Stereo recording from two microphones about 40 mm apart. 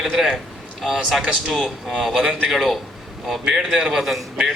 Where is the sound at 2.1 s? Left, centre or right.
Right.